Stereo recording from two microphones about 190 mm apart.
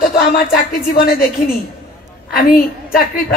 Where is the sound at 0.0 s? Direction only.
50° left (ahead or behind).